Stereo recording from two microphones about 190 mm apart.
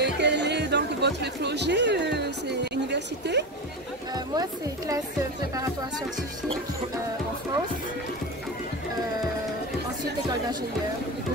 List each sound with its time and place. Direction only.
0.0 s speech: 65° right (ahead or behind)
4.1 s speech: 20° right (ahead or behind)